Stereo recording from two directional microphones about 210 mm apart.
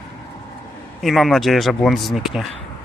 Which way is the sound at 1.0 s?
Centre (ahead or behind).